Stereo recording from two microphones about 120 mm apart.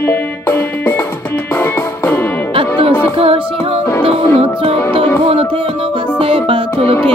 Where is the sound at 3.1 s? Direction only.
50° right (ahead or behind).